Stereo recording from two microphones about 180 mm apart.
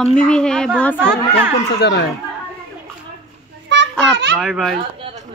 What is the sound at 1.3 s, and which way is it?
Speech, 70° left (ahead or behind).